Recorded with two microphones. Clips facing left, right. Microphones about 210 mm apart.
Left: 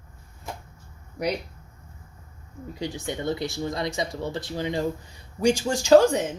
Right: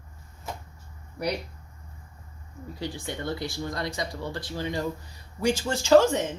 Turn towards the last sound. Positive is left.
turn(degrees=10)  # may be behind; listen again after turning